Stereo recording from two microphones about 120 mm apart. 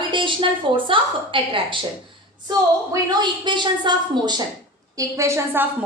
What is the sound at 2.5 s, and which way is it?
A woman's voice, 30° right (ahead or behind).